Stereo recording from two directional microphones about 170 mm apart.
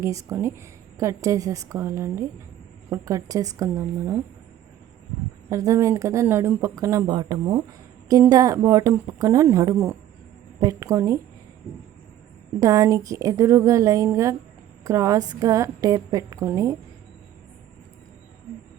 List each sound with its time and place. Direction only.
0.0 s a woman's voice: 20° right (ahead or behind)
5.5 s a woman's voice: 20° right (ahead or behind)
12.5 s a woman's voice: 20° right (ahead or behind)